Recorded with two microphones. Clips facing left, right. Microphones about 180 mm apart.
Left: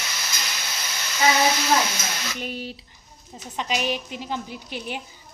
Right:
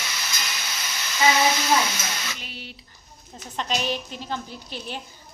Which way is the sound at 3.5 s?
10° left (ahead or behind).